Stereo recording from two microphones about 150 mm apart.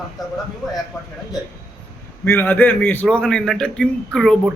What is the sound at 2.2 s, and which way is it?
A man's voice, 15° left (ahead or behind).